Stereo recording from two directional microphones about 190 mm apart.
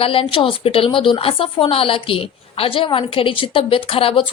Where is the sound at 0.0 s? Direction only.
30° left (ahead or behind).